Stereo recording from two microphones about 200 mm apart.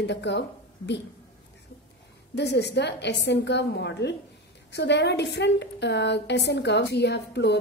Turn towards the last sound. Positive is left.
turn(degrees=55)  # may be behind; listen again after turning